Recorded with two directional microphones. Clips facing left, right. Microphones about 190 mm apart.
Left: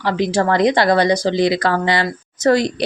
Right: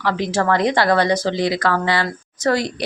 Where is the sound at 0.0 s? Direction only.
20° left (ahead or behind).